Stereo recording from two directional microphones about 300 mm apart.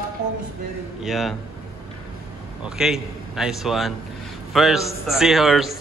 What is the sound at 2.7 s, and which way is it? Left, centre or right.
A man's voice, centre.